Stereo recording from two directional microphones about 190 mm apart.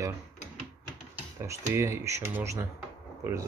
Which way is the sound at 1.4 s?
15° right (ahead or behind).